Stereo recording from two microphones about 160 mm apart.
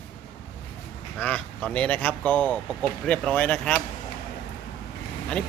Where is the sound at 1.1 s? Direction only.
10° left (ahead or behind).